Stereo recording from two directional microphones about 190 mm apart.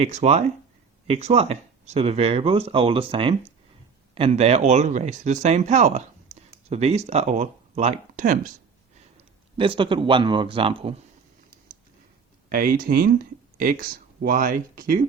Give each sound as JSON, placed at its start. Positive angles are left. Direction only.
{"t": 0.0, "sound": "speech", "side_deg": -35}
{"t": 6.3, "sound": "a sound", "side_deg": -35}
{"t": 6.7, "sound": "speech", "side_deg": -35}
{"t": 9.1, "sound": "speech", "side_deg": -25}
{"t": 12.5, "sound": "speech", "side_deg": -50}